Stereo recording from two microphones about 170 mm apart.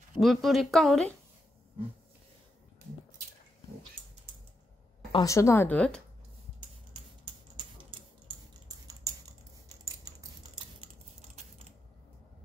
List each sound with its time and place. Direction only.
0.2 s speech: centre (ahead or behind)
5.1 s speech: 20° left (ahead or behind)
8.6 s typing: 20° right (ahead or behind)
10.8 s typing: 40° right (ahead or behind)